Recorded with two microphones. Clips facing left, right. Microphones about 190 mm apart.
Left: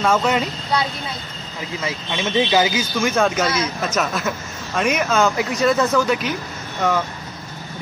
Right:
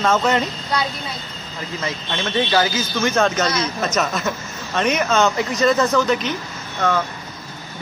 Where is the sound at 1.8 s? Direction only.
5° left (ahead or behind).